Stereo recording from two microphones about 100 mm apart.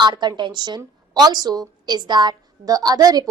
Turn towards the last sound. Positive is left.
turn(degrees=-40)  # may be behind; listen again after turning